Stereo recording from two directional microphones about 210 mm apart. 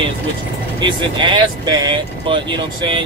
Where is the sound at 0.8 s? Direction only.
20° right (ahead or behind).